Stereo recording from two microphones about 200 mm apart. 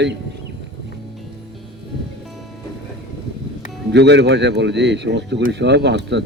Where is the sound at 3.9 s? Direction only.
60° right (ahead or behind).